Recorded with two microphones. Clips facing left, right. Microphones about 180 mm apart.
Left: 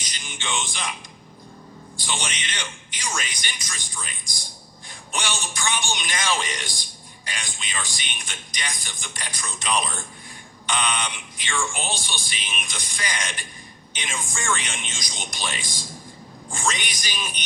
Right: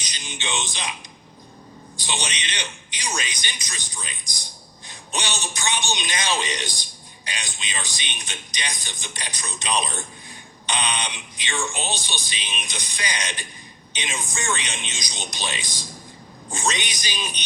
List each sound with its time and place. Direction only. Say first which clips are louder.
0.0 s music: right 1 dB; 20° right (ahead or behind)
2.0 s a man's voice: right 1 dB; 20° right (ahead or behind)